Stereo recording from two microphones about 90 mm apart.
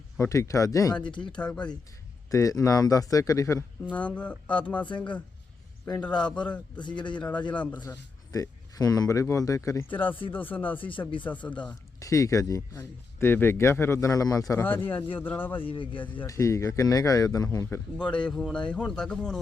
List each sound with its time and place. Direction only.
0.2 s speech: 35° left (ahead or behind)
1.2 s speech: 15° left (ahead or behind)
2.3 s speech: 40° left (ahead or behind)
3.9 s speech: 15° left (ahead or behind)
6.7 s a man's voice: 60° left (ahead or behind)
7.2 s speech: 15° left (ahead or behind)
8.3 s speech: 40° left (ahead or behind)
9.9 s speech: 20° left (ahead or behind)
11.9 s speech: 40° left (ahead or behind)
14.6 s speech: 20° left (ahead or behind)
15.6 s speech: 75° left (ahead or behind)
16.2 s speech: 35° left (ahead or behind)
18.3 s speech: 5° left (ahead or behind)